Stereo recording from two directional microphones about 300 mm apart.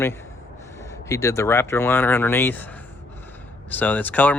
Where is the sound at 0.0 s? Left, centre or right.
Centre.